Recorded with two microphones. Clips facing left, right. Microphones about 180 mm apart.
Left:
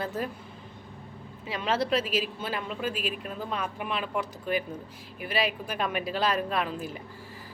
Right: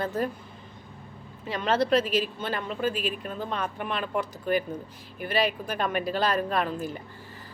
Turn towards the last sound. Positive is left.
turn(degrees=0)  # may be behind; listen again after turning